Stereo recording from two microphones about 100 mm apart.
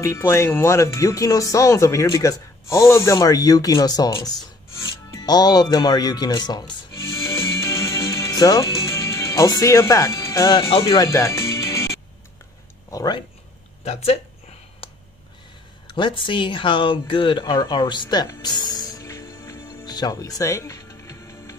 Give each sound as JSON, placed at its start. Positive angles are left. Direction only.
{"t": 0.0, "sound": "speech", "side_deg": 30}
{"t": 7.0, "sound": "music", "side_deg": 30}
{"t": 10.7, "sound": "speech", "side_deg": 65}
{"t": 11.0, "sound": "music", "side_deg": 30}
{"t": 12.9, "sound": "speech", "side_deg": 40}
{"t": 13.8, "sound": "speech", "side_deg": 90}
{"t": 15.9, "sound": "speech", "side_deg": 55}
{"t": 17.6, "sound": "music", "side_deg": 50}
{"t": 19.8, "sound": "music", "side_deg": 40}